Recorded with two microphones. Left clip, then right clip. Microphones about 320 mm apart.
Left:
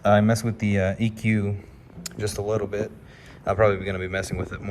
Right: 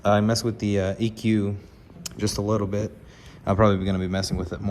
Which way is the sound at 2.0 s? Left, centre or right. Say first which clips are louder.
Right 1 dB; centre.